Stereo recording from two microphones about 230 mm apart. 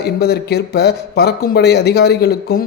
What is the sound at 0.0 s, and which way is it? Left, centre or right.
A man's voice, left.